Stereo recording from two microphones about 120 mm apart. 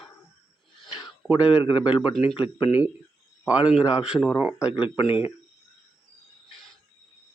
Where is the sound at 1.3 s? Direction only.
10° right (ahead or behind).